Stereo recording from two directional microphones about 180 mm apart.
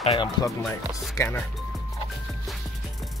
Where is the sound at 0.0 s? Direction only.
35° left (ahead or behind).